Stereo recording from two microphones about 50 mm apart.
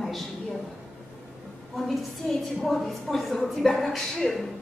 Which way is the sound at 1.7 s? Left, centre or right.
Centre.